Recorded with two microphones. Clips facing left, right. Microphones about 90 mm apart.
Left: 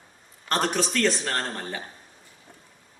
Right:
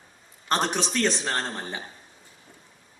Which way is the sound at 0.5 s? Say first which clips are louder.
Even; 20° right (ahead or behind).